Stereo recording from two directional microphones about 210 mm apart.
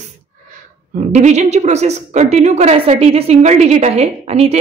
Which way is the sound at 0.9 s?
35° right (ahead or behind).